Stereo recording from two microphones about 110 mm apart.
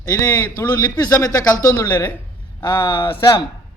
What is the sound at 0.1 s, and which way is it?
A man's voice, 30° left (ahead or behind).